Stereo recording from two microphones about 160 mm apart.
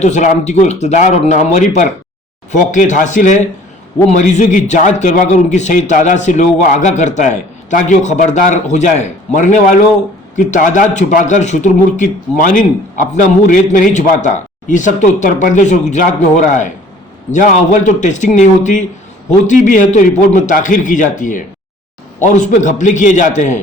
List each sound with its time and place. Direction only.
0.0 s a man's voice: 45° left (ahead or behind)
17.3 s a man's voice: 50° left (ahead or behind)